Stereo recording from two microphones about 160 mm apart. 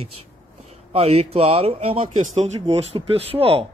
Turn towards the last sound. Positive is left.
turn(degrees=-35)  # may be behind; listen again after turning